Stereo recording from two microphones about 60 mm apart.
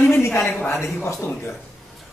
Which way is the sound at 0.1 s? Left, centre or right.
Left.